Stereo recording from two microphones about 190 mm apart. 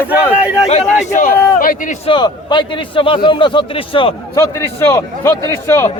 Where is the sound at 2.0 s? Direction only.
25° left (ahead or behind).